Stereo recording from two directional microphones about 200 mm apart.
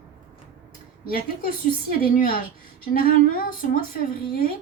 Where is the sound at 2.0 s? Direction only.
45° left (ahead or behind).